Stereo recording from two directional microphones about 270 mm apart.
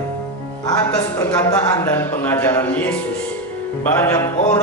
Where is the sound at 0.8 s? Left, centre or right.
Centre.